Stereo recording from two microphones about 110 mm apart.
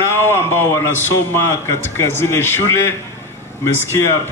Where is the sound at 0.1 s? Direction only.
25° left (ahead or behind).